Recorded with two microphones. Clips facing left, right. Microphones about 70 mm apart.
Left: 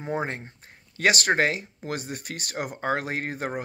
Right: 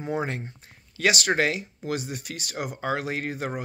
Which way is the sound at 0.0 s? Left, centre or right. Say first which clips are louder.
Even; left.